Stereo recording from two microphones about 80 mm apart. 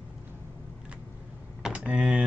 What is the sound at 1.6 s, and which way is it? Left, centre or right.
Computer keyboard, centre.